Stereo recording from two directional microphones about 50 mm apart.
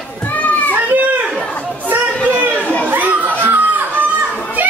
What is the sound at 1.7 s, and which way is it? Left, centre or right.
Chatter, right.